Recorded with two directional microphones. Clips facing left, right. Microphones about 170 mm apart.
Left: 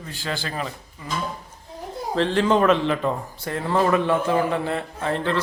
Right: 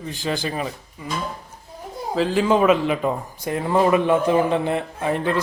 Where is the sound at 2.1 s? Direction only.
5° right (ahead or behind).